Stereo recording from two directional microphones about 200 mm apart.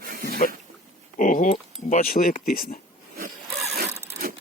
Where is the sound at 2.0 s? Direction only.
45° left (ahead or behind).